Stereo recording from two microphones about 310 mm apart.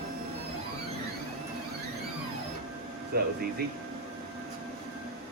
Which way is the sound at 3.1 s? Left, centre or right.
Right.